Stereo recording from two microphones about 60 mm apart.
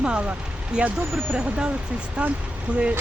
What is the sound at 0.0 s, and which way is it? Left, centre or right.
Speech, centre.